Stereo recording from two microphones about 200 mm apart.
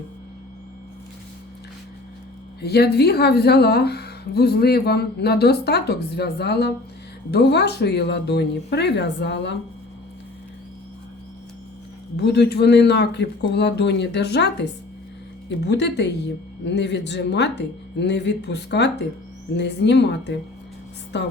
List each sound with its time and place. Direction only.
2.6 s speech: 55° left (ahead or behind)
12.1 s speech: 55° left (ahead or behind)